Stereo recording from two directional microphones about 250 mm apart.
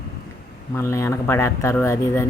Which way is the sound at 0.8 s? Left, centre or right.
Centre.